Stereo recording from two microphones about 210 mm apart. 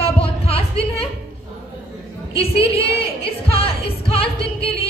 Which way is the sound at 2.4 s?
25° left (ahead or behind).